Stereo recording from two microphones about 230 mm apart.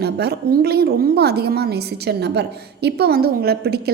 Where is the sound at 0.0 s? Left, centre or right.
Right.